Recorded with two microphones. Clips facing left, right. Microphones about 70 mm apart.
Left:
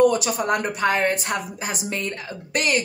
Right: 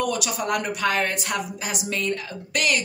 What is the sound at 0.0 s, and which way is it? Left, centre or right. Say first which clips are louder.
A woman's voice: left 7 dB; left.